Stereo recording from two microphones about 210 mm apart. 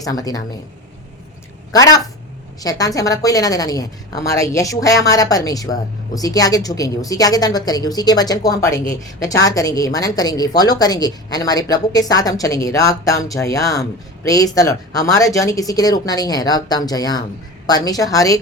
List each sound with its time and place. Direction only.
0.0 s speech: 15° left (ahead or behind)
1.7 s speech: 15° left (ahead or behind)